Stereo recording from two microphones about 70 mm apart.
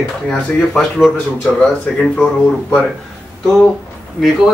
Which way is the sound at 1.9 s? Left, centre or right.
Left.